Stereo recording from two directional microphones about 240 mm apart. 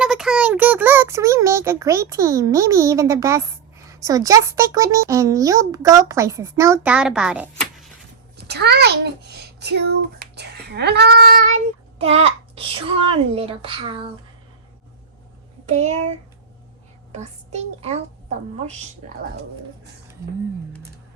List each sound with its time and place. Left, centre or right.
0.0 s a child's voice: centre
8.4 s a child's voice: right
15.6 s speech: right
17.1 s a child's voice: right